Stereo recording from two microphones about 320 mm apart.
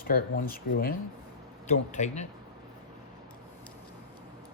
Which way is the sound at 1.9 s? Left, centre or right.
Left.